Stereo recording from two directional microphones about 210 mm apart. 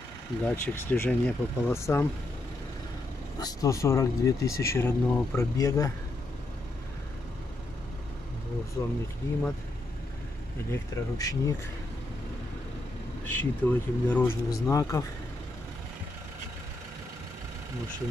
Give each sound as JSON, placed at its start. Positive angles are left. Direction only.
{"t": 0.4, "sound": "speech", "side_deg": 10}
{"t": 3.3, "sound": "speech", "side_deg": 15}
{"t": 8.8, "sound": "speech", "side_deg": 15}
{"t": 10.7, "sound": "speech", "side_deg": 15}
{"t": 13.2, "sound": "speech", "side_deg": 10}